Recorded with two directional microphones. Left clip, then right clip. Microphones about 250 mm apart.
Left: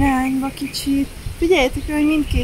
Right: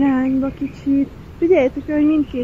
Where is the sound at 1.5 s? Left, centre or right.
Left.